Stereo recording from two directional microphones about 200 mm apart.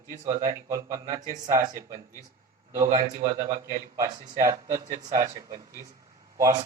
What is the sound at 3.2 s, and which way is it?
A man's voice, 15° right (ahead or behind).